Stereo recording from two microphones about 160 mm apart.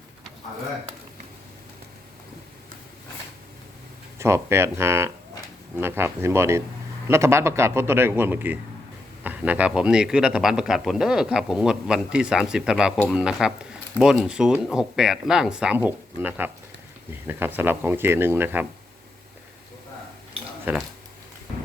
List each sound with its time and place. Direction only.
4.2 s a man's voice: 15° right (ahead or behind)
20.7 s speech: 10° right (ahead or behind)